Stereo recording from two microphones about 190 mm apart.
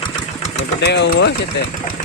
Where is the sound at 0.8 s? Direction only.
65° left (ahead or behind).